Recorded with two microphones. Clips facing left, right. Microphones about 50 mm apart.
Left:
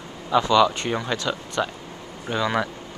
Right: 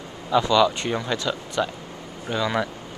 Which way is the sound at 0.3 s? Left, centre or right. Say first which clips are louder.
Left 1 dB; centre.